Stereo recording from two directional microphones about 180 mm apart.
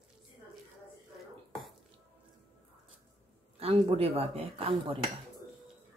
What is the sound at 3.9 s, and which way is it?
Speech, 35° right (ahead or behind).